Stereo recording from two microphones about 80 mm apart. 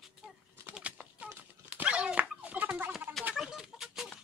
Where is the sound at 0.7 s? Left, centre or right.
Centre.